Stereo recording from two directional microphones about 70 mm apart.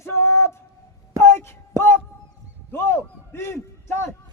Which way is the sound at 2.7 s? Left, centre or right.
Left.